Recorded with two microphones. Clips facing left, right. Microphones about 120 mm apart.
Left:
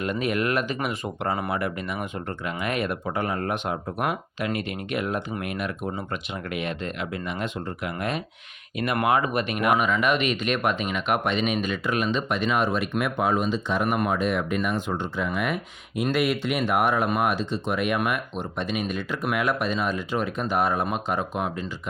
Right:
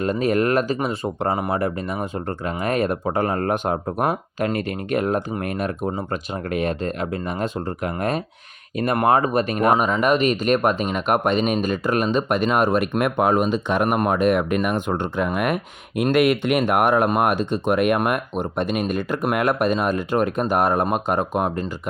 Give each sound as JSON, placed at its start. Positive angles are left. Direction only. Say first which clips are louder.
{"t": 0.0, "sound": "speech", "louder": "right 6 dB", "side_deg": -35}